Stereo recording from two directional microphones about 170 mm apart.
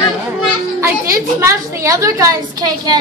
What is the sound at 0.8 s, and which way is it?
A woman's voice, 15° right (ahead or behind).